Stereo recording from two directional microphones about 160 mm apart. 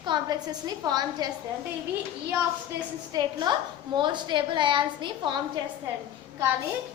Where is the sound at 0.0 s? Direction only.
25° right (ahead or behind).